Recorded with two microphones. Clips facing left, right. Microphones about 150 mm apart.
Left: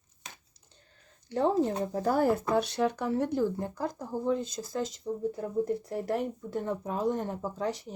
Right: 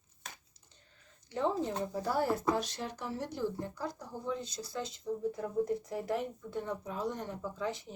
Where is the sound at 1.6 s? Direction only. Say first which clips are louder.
Left 6 dB; 50° left (ahead or behind).